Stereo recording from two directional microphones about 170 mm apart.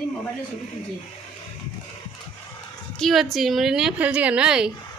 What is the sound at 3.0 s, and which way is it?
A woman's voice, centre (ahead or behind).